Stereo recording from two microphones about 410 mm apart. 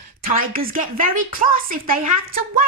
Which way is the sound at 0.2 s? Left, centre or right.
Right.